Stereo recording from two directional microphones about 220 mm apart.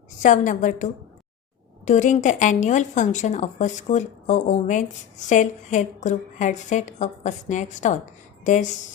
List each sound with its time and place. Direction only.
0.2 s a woman's voice: 35° left (ahead or behind)